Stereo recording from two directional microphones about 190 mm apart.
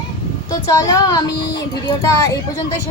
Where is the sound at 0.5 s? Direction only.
20° left (ahead or behind).